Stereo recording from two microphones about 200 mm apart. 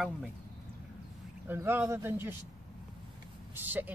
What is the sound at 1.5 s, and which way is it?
Speech, 10° right (ahead or behind).